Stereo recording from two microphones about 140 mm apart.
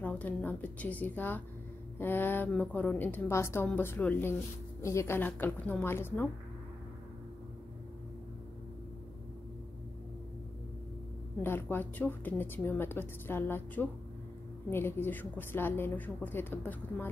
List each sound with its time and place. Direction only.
0.0 s a woman's voice: 10° left (ahead or behind)
11.4 s a woman's voice: 15° left (ahead or behind)